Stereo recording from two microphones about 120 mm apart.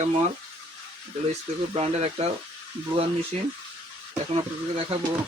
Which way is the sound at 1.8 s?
60° right (ahead or behind).